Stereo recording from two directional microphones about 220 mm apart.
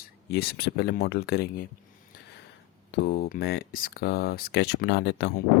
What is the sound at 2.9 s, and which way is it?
Speech, 45° left (ahead or behind).